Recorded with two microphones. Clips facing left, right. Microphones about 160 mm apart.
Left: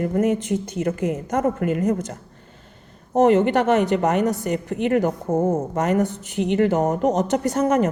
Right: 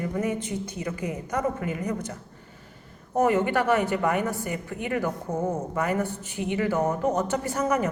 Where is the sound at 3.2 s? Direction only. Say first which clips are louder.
Left 6 dB; 70° left (ahead or behind).